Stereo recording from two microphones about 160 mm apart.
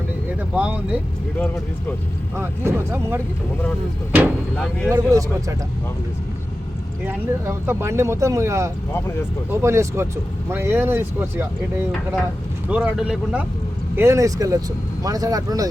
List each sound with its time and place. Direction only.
0.5 s speech: 10° right (ahead or behind)
2.3 s speech: 15° right (ahead or behind)
4.5 s speech: 5° left (ahead or behind)
4.9 s speech: 20° right (ahead or behind)
7.0 s speech: 15° right (ahead or behind)
8.9 s speech: 15° left (ahead or behind)
9.6 s speech: 15° right (ahead or behind)
13.9 s speech: 15° right (ahead or behind)